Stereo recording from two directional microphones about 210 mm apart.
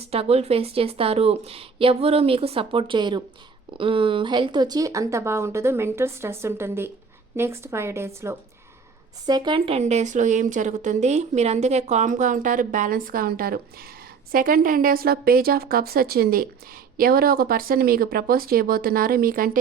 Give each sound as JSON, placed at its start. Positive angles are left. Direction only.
{"t": 0.0, "sound": "a woman's voice", "side_deg": -30}